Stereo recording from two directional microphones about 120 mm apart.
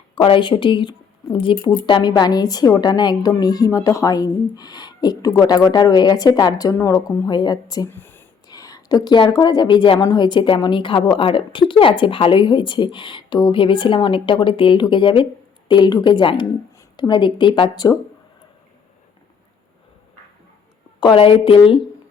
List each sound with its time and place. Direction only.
0.2 s speech: 45° left (ahead or behind)
7.9 s a sound: 15° left (ahead or behind)
8.4 s a woman's voice: 30° left (ahead or behind)
21.0 s a woman's voice: 45° left (ahead or behind)